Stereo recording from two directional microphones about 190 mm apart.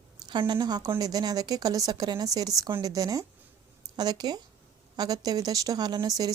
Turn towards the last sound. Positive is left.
turn(degrees=-20)  # may be behind; listen again after turning